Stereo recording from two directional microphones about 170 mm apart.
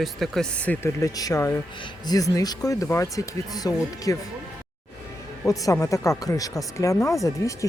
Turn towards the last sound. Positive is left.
turn(degrees=20)  # may be behind; listen again after turning